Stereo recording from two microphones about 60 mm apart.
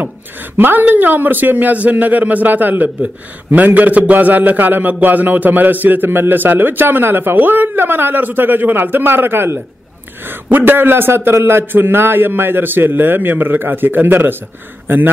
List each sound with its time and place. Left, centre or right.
0.6 s a man's voice: right